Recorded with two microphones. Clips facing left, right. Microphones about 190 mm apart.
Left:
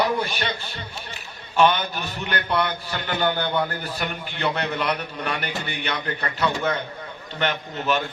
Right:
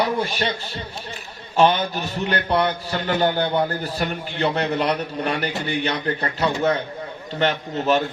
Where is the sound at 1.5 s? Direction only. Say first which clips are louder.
Right 2 dB; 30° right (ahead or behind).